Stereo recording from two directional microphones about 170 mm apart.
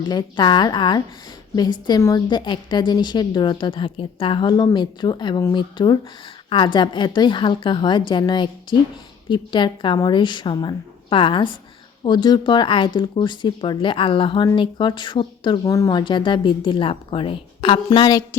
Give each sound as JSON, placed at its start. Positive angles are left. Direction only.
{"t": 0.0, "sound": "speech", "side_deg": 25}